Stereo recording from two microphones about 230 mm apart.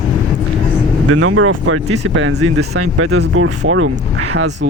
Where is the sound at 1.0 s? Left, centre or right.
Right.